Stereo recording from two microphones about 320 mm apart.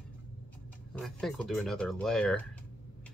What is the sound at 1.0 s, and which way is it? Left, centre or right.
Speech, centre.